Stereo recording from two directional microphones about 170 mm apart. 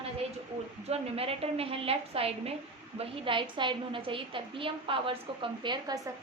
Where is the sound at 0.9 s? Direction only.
35° right (ahead or behind).